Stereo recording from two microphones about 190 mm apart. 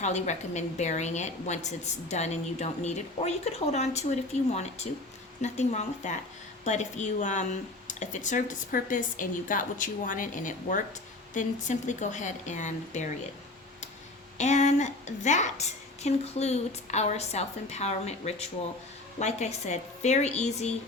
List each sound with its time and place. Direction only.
0.0 s a woman's voice: 40° left (ahead or behind)
14.3 s a woman's voice: 35° left (ahead or behind)